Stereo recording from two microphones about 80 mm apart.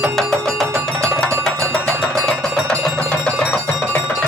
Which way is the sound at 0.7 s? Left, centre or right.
Right.